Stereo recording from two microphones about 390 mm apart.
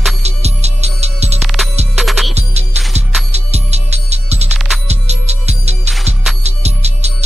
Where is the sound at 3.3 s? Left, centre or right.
Centre.